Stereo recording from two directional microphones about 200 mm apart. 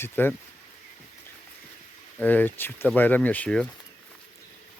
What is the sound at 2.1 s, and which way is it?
Speech, 10° left (ahead or behind).